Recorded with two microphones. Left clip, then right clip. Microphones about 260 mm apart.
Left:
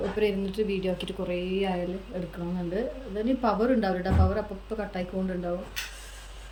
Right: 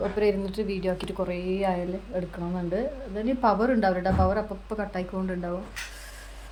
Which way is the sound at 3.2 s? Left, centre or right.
Centre.